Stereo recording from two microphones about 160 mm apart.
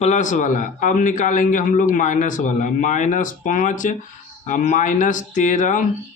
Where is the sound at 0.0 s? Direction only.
50° left (ahead or behind).